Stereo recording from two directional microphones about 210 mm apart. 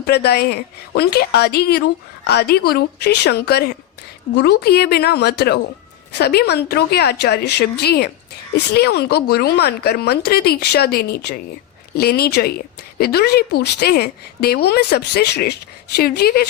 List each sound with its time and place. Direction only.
0.0 s a woman's voice: 50° left (ahead or behind)